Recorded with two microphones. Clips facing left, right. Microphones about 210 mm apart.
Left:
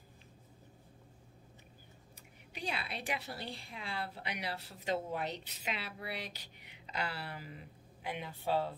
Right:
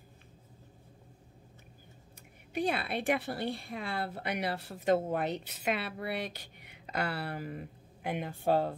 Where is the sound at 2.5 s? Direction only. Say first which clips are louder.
Right 9 dB; 50° right (ahead or behind).